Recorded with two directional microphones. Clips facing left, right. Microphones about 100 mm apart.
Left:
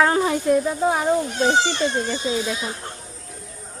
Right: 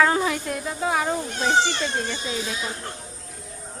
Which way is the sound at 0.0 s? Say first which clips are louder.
Left 2 dB; 20° left (ahead or behind).